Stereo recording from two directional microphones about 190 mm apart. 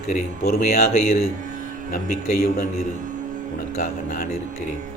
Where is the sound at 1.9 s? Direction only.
50° left (ahead or behind).